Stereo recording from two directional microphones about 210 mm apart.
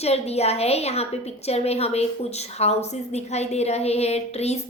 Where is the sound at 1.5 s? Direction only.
30° left (ahead or behind).